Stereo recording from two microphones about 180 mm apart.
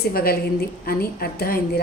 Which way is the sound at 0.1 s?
55° left (ahead or behind).